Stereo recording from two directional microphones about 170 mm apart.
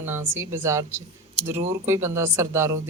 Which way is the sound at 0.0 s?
15° right (ahead or behind).